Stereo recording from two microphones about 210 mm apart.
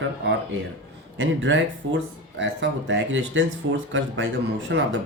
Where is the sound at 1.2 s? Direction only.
60° right (ahead or behind).